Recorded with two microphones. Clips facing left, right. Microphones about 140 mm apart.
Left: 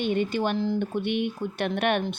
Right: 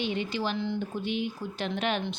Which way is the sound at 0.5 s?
40° left (ahead or behind).